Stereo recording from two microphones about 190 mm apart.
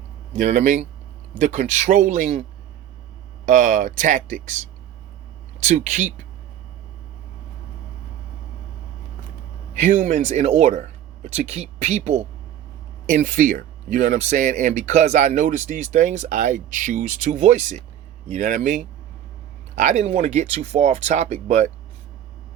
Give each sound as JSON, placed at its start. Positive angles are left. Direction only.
{"t": 0.3, "sound": "speech", "side_deg": -40}
{"t": 3.4, "sound": "speech", "side_deg": -40}
{"t": 9.7, "sound": "speech", "side_deg": -40}